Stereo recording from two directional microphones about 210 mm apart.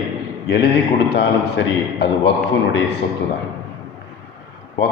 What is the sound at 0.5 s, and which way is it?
A man's voice, 55° left (ahead or behind).